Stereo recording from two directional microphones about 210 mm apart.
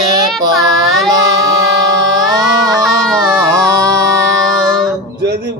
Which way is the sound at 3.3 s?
15° right (ahead or behind).